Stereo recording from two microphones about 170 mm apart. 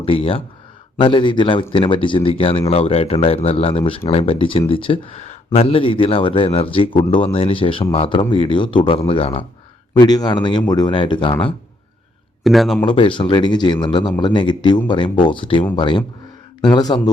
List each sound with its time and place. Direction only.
0.0 s speech: 35° left (ahead or behind)
10.0 s speech: 25° left (ahead or behind)
12.4 s speech: centre (ahead or behind)
12.8 s speech: 30° left (ahead or behind)